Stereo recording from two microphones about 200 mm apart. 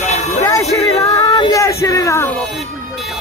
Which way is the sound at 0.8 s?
15° left (ahead or behind).